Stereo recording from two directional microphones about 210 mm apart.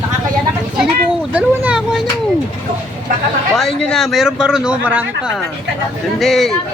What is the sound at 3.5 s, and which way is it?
A man's voice, centre (ahead or behind).